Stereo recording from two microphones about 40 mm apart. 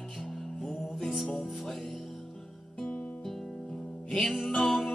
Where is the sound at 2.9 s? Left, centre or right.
Left.